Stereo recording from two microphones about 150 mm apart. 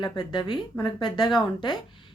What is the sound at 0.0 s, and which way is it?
Speech, 30° left (ahead or behind).